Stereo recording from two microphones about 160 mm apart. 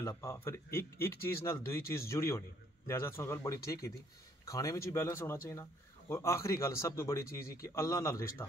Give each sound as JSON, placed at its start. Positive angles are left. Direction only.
{"t": 0.0, "sound": "a man's voice", "side_deg": 20}